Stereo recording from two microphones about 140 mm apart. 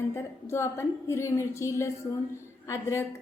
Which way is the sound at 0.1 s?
20° left (ahead or behind).